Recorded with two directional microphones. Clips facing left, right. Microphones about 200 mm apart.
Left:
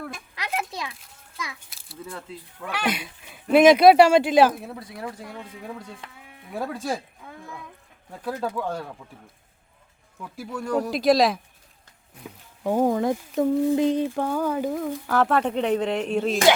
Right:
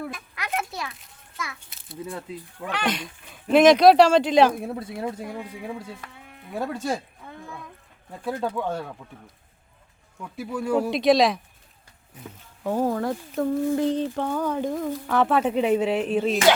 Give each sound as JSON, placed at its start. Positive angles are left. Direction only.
{"t": 0.1, "sound": "a sound", "side_deg": 20}
{"t": 2.0, "sound": "speech", "side_deg": -15}
{"t": 2.6, "sound": "speech", "side_deg": 10}
{"t": 4.7, "sound": "speech", "side_deg": -25}
{"t": 6.1, "sound": "sheep", "side_deg": 0}
{"t": 8.1, "sound": "speech", "side_deg": 0}
{"t": 10.2, "sound": "speech", "side_deg": 0}
{"t": 12.6, "sound": "speech", "side_deg": 15}